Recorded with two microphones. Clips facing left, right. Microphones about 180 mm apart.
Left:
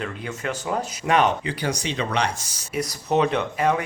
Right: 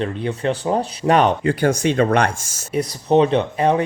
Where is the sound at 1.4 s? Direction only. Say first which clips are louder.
Right 9 dB; 50° right (ahead or behind).